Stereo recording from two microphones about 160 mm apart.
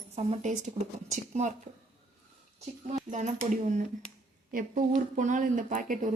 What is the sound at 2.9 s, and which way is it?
Speech, 45° right (ahead or behind).